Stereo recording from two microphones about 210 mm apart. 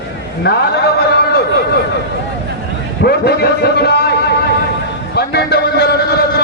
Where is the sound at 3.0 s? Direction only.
50° left (ahead or behind).